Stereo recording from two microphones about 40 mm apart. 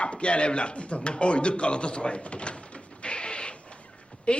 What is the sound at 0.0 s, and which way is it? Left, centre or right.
A woman's voice, left.